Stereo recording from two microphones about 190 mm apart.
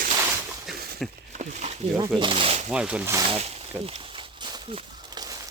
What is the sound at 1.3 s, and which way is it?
Speech, 40° right (ahead or behind).